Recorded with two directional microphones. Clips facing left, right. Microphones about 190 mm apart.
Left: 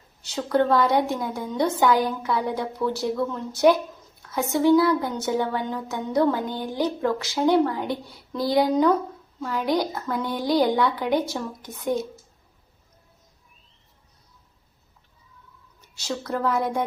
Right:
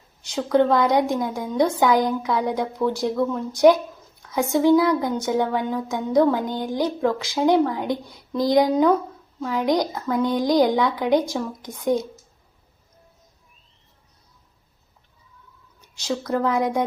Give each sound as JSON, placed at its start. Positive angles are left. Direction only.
{"t": 0.3, "sound": "speech", "side_deg": -10}
{"t": 16.0, "sound": "speech", "side_deg": -10}